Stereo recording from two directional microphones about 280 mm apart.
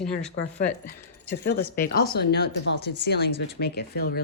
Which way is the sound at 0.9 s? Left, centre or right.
Left.